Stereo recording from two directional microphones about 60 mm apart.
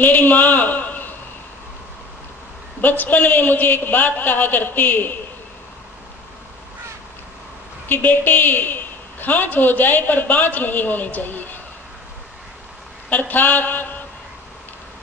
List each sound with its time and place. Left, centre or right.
0.0 s a sound: left
2.8 s a man's voice: left
7.9 s a woman's voice: left
13.1 s a woman's voice: left